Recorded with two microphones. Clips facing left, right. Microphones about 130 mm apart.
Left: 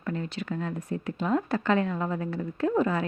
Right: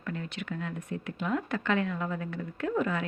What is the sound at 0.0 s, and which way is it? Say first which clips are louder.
Speech: left 4 dB; 35° left (ahead or behind).